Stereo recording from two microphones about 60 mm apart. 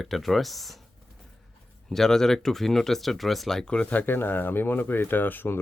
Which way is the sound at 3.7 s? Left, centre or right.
Left.